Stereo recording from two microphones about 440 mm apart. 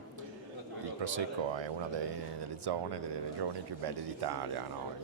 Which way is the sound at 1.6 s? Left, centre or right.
Right.